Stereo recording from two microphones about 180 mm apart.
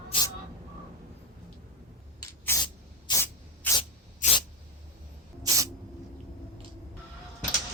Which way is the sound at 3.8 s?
30° left (ahead or behind).